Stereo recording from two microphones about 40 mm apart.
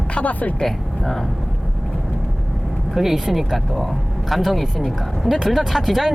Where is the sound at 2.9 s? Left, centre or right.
Centre.